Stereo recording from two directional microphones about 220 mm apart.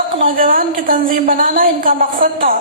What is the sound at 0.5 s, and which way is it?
A woman's voice, 40° right (ahead or behind).